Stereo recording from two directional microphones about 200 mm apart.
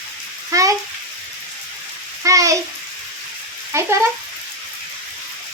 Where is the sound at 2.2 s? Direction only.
15° right (ahead or behind).